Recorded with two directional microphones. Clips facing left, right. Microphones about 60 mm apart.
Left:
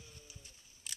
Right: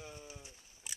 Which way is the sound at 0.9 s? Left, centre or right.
Centre.